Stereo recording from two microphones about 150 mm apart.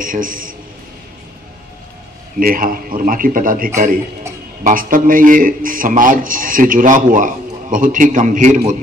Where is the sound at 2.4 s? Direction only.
75° right (ahead or behind).